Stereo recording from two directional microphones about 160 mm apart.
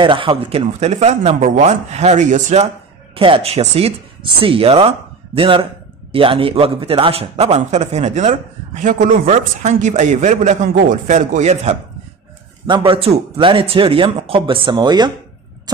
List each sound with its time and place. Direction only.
0.0 s speech: 30° right (ahead or behind)
3.2 s a man's voice: 35° right (ahead or behind)
12.6 s a man's voice: 30° right (ahead or behind)